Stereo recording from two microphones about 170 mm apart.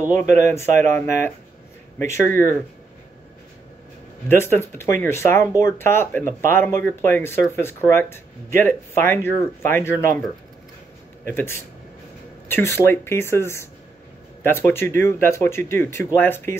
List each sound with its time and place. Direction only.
0.2 s speech: 15° left (ahead or behind)
4.4 s speech: 15° left (ahead or behind)
11.2 s speech: 15° left (ahead or behind)